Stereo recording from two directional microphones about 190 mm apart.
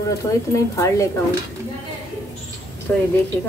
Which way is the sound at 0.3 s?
15° left (ahead or behind).